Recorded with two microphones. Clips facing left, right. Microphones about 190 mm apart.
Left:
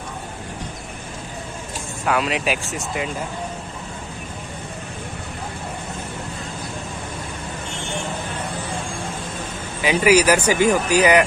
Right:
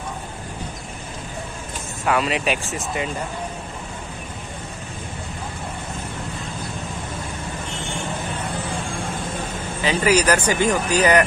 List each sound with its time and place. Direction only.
2.0 s speech: centre (ahead or behind)
9.8 s speech: 10° left (ahead or behind)